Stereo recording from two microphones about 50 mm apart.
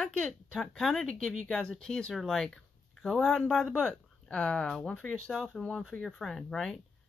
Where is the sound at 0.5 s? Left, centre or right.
Centre.